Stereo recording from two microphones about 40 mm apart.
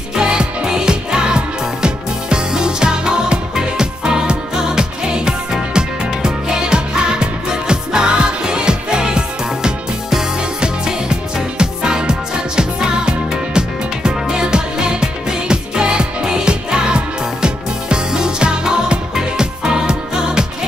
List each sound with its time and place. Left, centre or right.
0.1 s music: centre